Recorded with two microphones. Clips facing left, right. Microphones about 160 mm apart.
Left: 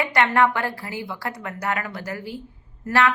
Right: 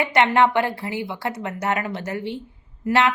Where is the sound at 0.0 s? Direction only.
20° right (ahead or behind).